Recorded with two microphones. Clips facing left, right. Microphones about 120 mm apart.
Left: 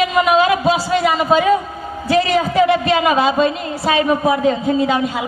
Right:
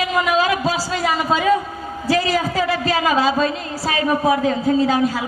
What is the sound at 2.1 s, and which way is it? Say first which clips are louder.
A woman's voice: left 3 dB; 25° left (ahead or behind).